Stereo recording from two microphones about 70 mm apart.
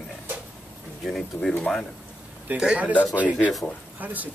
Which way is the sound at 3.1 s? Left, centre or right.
Right.